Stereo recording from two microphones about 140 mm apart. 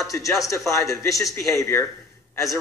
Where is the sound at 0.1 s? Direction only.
15° left (ahead or behind).